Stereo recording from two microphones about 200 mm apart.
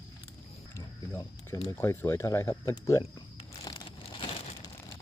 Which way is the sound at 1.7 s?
10° left (ahead or behind).